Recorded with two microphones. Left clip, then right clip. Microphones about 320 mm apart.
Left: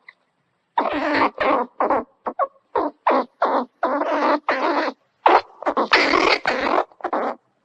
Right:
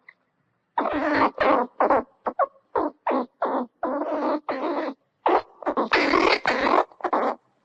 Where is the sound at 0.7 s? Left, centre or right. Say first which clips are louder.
Left 3 dB; centre.